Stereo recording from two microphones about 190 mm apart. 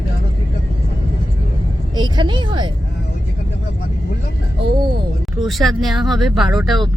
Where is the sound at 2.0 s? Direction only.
25° right (ahead or behind).